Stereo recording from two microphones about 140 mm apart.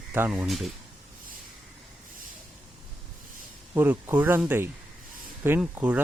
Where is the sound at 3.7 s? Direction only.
15° right (ahead or behind).